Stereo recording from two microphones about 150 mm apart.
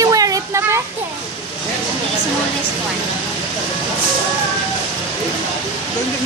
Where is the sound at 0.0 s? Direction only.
25° right (ahead or behind).